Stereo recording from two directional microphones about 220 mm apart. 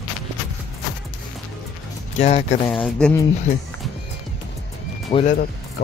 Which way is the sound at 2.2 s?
30° left (ahead or behind).